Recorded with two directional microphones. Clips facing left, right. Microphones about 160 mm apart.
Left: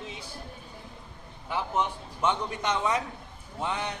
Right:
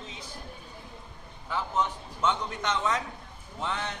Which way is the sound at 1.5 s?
15° left (ahead or behind).